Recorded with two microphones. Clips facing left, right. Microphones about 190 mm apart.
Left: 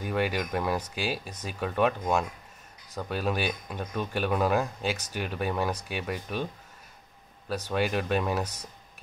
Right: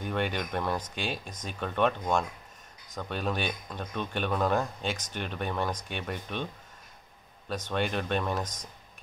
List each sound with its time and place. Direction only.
0.0 s speech: 5° left (ahead or behind)